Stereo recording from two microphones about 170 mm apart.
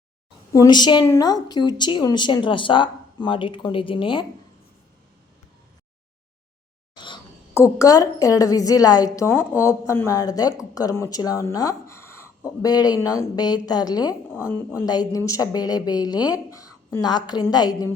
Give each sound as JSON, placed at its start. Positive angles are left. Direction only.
{"t": 0.5, "sound": "a woman's voice", "side_deg": 20}
{"t": 6.9, "sound": "a sound", "side_deg": 25}
{"t": 7.5, "sound": "a woman's voice", "side_deg": 20}